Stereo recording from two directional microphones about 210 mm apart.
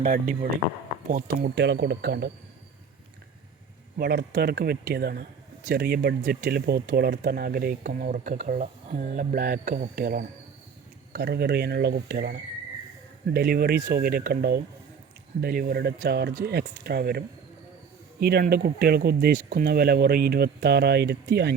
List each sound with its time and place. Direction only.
0.0 s speech: 40° right (ahead or behind)
3.9 s speech: 50° right (ahead or behind)